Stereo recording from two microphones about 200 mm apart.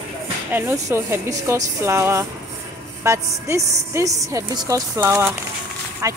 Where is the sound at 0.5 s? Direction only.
10° right (ahead or behind).